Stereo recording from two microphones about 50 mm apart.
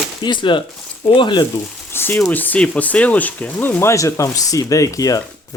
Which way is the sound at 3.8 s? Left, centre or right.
Left.